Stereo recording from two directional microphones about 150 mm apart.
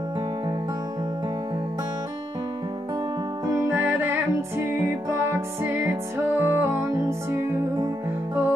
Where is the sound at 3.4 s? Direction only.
15° right (ahead or behind).